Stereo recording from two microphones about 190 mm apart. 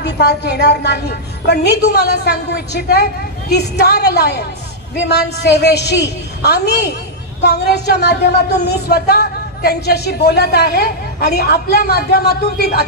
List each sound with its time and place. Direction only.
0.0 s a woman's voice: 60° left (ahead or behind)